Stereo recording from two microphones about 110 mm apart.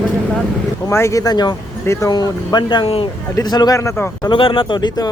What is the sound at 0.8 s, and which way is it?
Speech, 25° left (ahead or behind).